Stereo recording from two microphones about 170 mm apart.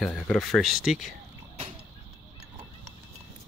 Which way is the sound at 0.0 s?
Centre (ahead or behind).